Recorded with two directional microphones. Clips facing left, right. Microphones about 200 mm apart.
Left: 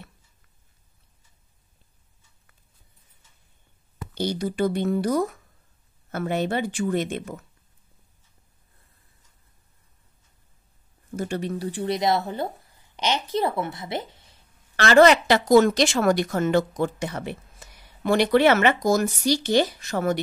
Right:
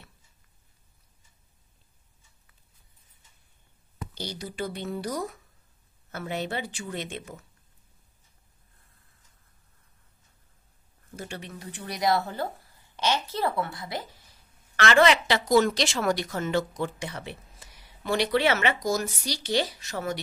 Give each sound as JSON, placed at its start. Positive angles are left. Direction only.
{"t": 4.2, "sound": "speech", "side_deg": 50}
{"t": 11.1, "sound": "speech", "side_deg": 40}